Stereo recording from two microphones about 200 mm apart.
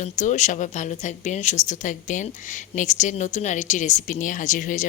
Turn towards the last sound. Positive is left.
turn(degrees=40)  # may be behind; listen again after turning